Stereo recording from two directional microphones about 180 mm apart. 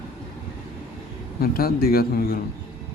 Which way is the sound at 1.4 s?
55° left (ahead or behind).